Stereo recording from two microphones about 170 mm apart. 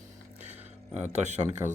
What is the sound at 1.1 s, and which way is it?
Speech, 40° right (ahead or behind).